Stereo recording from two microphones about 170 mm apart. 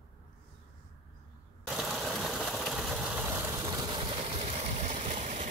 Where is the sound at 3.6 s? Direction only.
25° right (ahead or behind); by 5.5 s 45° right (ahead or behind).